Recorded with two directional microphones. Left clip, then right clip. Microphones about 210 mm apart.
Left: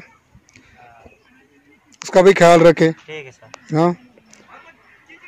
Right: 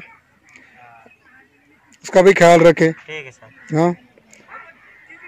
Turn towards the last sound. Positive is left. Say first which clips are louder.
# even
turn(degrees=0)  # may be behind; listen again after turning